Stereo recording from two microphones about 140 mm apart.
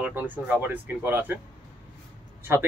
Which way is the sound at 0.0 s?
10° right (ahead or behind).